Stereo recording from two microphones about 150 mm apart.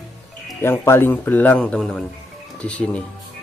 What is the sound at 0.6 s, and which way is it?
Speech, 15° left (ahead or behind).